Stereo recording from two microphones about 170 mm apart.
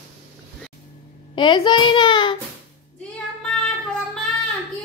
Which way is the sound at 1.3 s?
25° left (ahead or behind).